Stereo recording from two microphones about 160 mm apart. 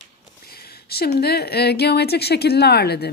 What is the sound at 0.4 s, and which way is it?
Speech, 75° left (ahead or behind).